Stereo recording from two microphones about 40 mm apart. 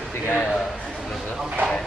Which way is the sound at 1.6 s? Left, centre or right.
Right.